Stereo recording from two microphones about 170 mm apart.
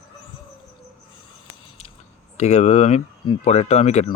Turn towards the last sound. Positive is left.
turn(degrees=40)  # may be behind; listen again after turning